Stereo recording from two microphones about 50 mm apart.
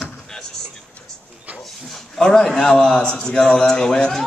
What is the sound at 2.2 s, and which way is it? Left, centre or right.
A man's voice, centre.